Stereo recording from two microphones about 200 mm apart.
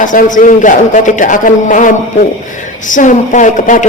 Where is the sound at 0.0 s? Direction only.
40° left (ahead or behind).